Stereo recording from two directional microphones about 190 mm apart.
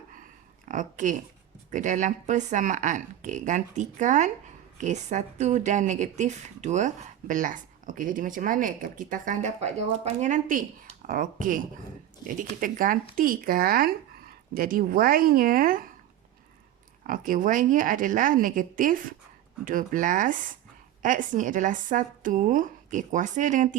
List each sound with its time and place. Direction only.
0.7 s speech: 40° right (ahead or behind)
17.1 s speech: 45° right (ahead or behind)